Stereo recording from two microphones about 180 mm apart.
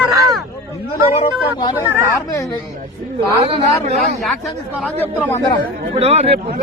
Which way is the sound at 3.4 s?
30° right (ahead or behind).